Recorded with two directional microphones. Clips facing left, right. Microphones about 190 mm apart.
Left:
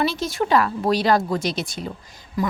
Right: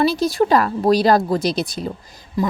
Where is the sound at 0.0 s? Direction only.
35° right (ahead or behind).